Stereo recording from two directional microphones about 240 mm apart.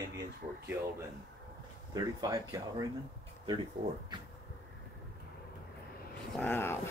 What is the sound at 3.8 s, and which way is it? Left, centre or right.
Speech, right.